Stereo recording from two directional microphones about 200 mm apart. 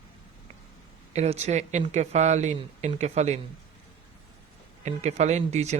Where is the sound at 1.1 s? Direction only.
30° right (ahead or behind).